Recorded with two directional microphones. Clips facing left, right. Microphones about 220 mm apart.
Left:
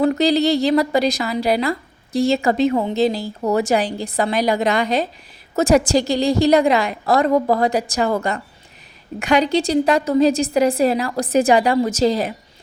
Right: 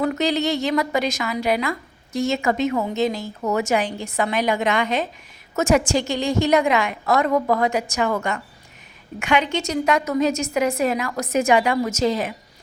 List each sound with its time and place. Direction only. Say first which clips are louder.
0.0 s a woman's voice: left 5 dB; 35° left (ahead or behind)